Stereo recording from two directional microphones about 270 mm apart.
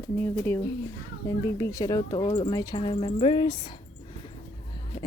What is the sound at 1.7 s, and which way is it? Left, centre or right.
Speech, centre.